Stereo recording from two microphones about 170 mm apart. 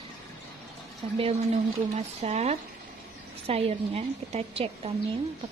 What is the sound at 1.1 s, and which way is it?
Speech, 35° right (ahead or behind).